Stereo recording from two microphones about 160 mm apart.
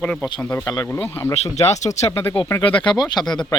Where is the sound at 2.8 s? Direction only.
25° left (ahead or behind).